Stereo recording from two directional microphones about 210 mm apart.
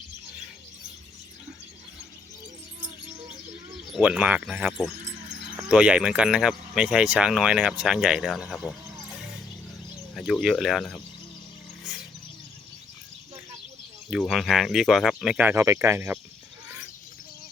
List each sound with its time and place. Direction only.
3.9 s speech: 5° right (ahead or behind)
5.0 s a sound: 35° right (ahead or behind)
5.5 s speech: 5° right (ahead or behind)
10.2 s speech: centre (ahead or behind)
14.1 s speech: centre (ahead or behind)